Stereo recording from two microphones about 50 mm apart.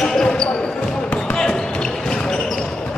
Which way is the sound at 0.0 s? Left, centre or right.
Centre.